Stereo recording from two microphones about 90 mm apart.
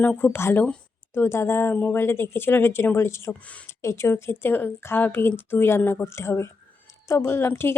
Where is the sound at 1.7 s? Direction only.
15° left (ahead or behind).